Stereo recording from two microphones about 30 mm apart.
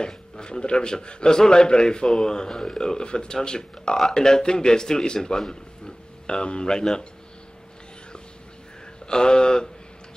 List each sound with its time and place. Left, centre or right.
0.0 s a man's voice: left
9.0 s a man's voice: left